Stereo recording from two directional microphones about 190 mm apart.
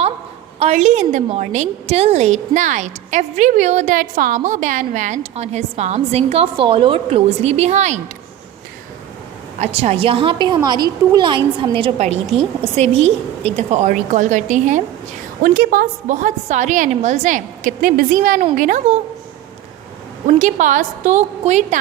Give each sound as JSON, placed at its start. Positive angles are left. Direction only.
{"t": 0.6, "sound": "a woman's voice", "side_deg": -35}
{"t": 9.6, "sound": "a woman's voice", "side_deg": -30}
{"t": 20.2, "sound": "a woman's voice", "side_deg": -40}